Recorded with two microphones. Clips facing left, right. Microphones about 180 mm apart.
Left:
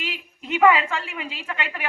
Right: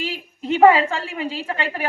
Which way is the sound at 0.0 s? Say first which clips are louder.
Right 6 dB; 35° right (ahead or behind).